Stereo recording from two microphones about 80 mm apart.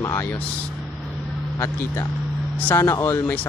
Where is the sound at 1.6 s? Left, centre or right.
Left.